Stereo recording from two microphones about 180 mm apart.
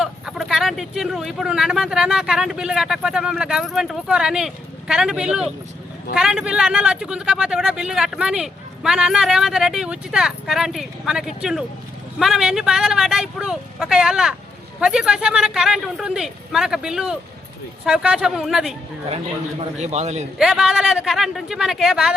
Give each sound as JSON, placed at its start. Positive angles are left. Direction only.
{"t": 0.0, "sound": "speech", "side_deg": 0}
{"t": 19.1, "sound": "a man's voice", "side_deg": -35}
{"t": 20.4, "sound": "speech", "side_deg": -5}